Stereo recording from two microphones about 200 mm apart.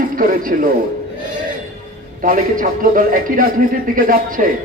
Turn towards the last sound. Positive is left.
turn(degrees=-45)  # may be behind; listen again after turning